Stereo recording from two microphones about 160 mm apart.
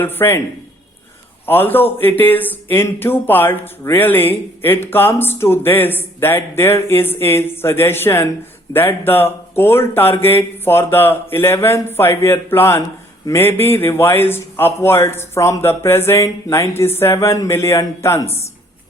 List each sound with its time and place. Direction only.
0.0 s speech: 15° left (ahead or behind)
1.5 s speech: 15° left (ahead or behind)